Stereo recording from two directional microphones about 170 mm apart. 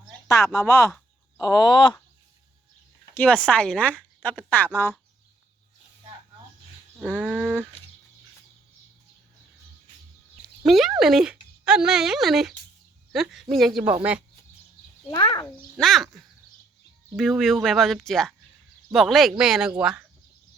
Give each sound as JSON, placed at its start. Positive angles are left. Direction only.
{"t": 0.3, "sound": "a woman's voice", "side_deg": 20}
{"t": 3.2, "sound": "a woman's voice", "side_deg": 5}
{"t": 7.0, "sound": "speech", "side_deg": -5}
{"t": 10.6, "sound": "speech", "side_deg": 0}
{"t": 15.1, "sound": "speech", "side_deg": 20}
{"t": 15.4, "sound": "speech", "side_deg": 0}